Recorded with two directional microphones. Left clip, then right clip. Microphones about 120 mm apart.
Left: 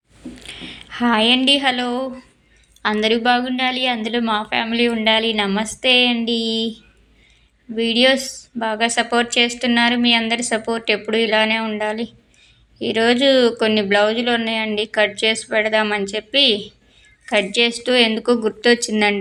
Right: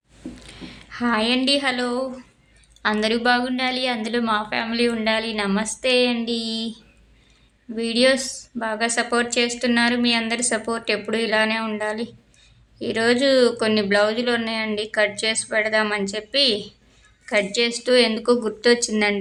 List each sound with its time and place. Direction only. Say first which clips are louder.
0.3 s a woman's voice: left 7 dB; 35° left (ahead or behind); by 19.1 s 15° left (ahead or behind)